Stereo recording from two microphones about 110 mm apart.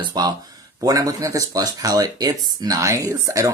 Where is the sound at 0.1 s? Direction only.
35° right (ahead or behind).